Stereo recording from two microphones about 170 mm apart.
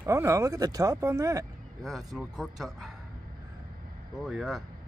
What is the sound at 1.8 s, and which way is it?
Speech, centre (ahead or behind).